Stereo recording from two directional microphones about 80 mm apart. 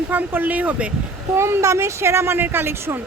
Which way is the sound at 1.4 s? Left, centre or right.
Right.